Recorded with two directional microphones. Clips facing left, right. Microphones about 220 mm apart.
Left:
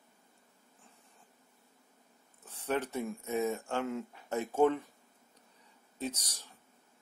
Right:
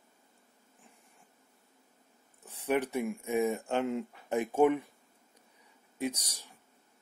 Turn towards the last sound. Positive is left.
turn(degrees=-10)  # may be behind; listen again after turning